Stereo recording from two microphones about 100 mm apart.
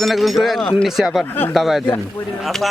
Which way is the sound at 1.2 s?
20° left (ahead or behind).